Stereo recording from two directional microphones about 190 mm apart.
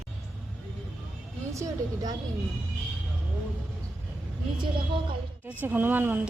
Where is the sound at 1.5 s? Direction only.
15° right (ahead or behind).